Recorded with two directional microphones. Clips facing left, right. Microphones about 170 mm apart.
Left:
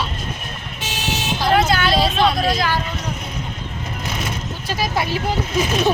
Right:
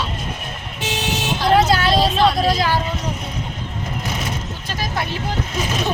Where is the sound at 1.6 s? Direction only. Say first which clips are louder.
Right 2 dB; 35° right (ahead or behind).